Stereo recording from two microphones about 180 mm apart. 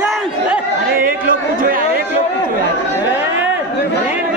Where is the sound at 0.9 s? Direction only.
50° right (ahead or behind).